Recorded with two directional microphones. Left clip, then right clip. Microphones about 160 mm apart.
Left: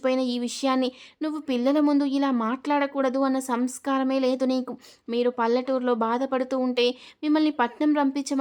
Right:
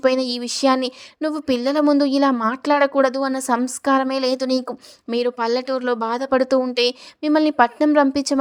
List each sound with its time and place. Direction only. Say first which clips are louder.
0.0 s speech: right 6 dB; 35° right (ahead or behind)